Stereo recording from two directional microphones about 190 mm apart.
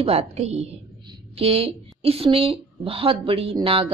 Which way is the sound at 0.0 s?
35° right (ahead or behind).